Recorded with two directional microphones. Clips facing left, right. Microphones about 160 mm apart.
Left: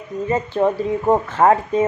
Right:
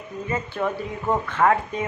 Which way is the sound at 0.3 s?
35° left (ahead or behind).